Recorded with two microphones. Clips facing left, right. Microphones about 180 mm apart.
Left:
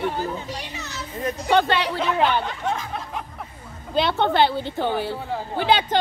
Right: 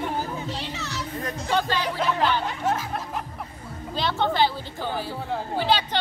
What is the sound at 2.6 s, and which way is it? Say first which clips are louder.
Speech: right 1 dB; 5° right (ahead or behind).